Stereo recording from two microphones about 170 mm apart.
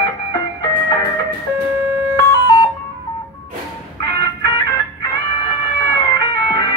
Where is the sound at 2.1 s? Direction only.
25° left (ahead or behind).